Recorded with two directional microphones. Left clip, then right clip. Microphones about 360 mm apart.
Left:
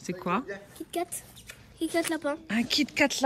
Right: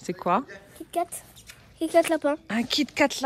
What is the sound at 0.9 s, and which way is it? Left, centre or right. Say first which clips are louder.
Speech: right 5 dB; centre.